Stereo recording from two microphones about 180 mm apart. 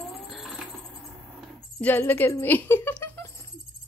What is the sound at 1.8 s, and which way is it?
Speech, 10° left (ahead or behind).